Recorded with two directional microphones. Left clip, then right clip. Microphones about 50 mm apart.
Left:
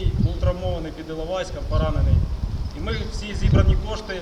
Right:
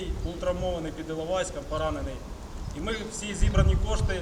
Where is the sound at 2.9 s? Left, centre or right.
Right.